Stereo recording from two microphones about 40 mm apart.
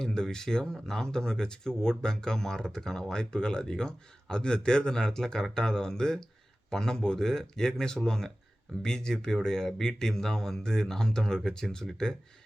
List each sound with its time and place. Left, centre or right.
0.0 s speech: centre